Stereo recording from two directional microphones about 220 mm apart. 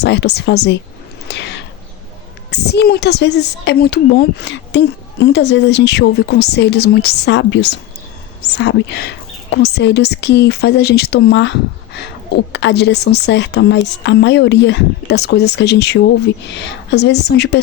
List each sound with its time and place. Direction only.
0.0 s speech: 50° left (ahead or behind)
1.3 s a sound: 55° left (ahead or behind)
2.5 s speech: 50° left (ahead or behind)